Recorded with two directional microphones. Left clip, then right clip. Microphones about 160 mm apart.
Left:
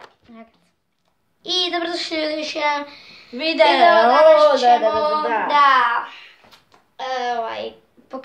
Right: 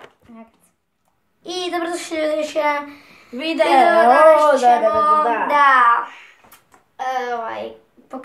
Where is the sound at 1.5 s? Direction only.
5° right (ahead or behind).